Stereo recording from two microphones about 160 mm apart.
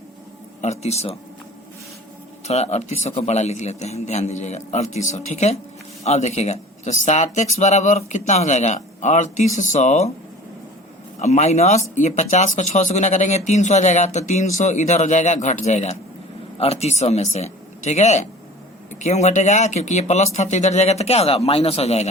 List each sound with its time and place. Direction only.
0.6 s speech: 45° left (ahead or behind)
2.5 s speech: 45° left (ahead or behind)
11.2 s speech: 45° left (ahead or behind)